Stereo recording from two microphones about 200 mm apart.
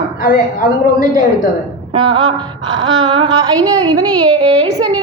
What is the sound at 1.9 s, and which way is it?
A woman's voice, 25° right (ahead or behind).